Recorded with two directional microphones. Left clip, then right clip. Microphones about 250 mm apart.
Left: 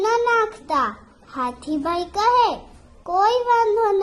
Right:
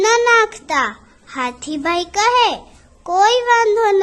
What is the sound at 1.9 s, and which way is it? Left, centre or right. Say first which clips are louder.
A child's voice: right 4 dB; right.